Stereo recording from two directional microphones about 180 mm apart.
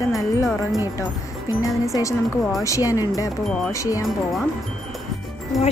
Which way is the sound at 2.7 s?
20° left (ahead or behind).